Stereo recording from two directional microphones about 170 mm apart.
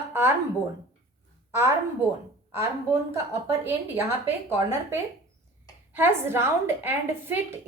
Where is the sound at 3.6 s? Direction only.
15° right (ahead or behind).